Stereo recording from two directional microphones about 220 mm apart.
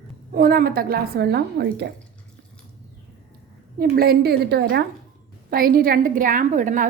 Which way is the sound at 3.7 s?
45° right (ahead or behind).